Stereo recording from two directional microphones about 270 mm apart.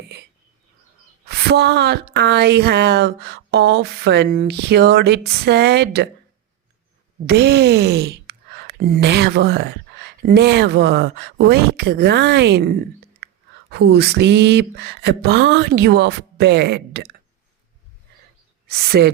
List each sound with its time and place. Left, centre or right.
1.3 s a woman's voice: right
7.3 s a woman's voice: right
18.7 s a woman's voice: right